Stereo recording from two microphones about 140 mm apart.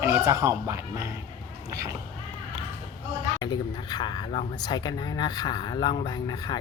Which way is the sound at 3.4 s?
30° left (ahead or behind).